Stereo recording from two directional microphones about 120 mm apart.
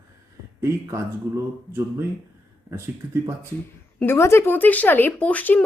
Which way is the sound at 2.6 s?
20° right (ahead or behind).